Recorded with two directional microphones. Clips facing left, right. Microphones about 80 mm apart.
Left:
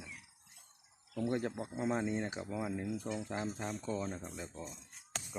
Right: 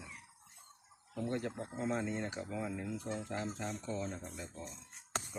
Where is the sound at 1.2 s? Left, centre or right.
Left.